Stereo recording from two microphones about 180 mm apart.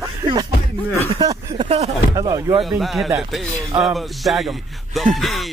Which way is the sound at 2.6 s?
Centre (ahead or behind).